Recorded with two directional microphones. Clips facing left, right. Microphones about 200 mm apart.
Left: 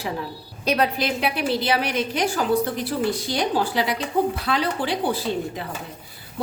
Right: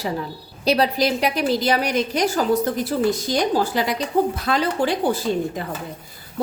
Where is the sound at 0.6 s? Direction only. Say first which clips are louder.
Right 3 dB; 35° right (ahead or behind).